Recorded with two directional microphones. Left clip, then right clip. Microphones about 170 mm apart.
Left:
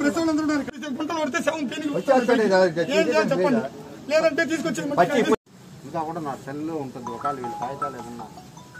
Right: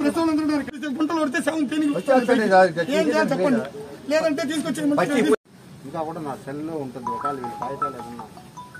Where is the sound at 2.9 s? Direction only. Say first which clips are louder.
Even; 10° left (ahead or behind).